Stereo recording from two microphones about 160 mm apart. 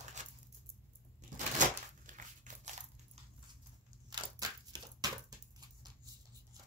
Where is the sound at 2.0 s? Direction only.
50° right (ahead or behind).